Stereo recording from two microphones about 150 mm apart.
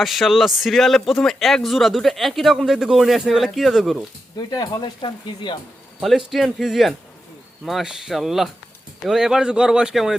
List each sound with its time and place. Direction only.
0.0 s speech: centre (ahead or behind)
4.4 s speech: 25° left (ahead or behind)
6.0 s speech: centre (ahead or behind)